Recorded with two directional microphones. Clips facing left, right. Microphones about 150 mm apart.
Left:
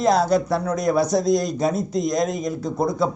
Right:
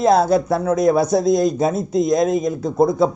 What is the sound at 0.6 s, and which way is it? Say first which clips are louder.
A man's voice: right 4 dB; 25° right (ahead or behind).